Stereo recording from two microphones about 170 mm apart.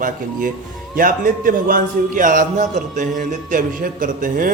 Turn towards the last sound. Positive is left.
turn(degrees=-55)  # may be behind; listen again after turning